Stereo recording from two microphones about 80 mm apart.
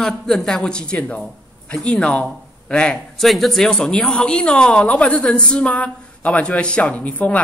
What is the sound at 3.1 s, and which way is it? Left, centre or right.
Speech, centre.